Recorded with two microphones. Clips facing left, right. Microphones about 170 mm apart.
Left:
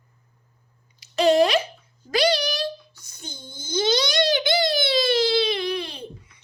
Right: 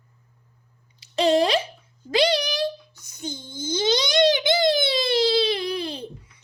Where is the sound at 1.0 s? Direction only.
30° right (ahead or behind).